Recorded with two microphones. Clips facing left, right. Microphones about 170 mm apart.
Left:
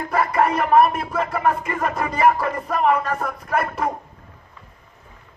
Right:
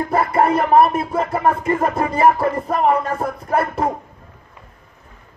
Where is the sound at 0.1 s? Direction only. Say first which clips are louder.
Right 2 dB; 30° right (ahead or behind).